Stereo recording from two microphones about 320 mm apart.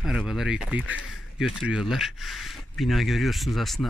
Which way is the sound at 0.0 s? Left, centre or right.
Centre.